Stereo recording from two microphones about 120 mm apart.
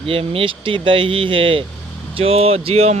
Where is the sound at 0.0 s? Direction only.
50° right (ahead or behind).